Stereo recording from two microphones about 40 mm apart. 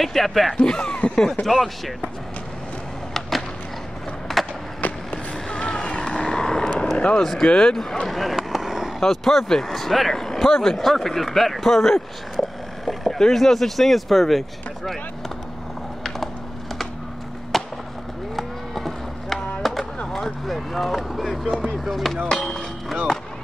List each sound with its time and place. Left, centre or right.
0.0 s speech: centre
0.7 s speech: left
0.9 s speech: left
1.4 s speech: centre
3.2 s skateboard: centre
4.8 s skateboard: left
5.6 s vehicle: left
7.2 s speech: centre
7.7 s speech: centre
8.4 s a sound: centre
9.0 s speech: centre
17.5 s skateboard: centre
18.3 s a sound: centre
20.1 s speech: centre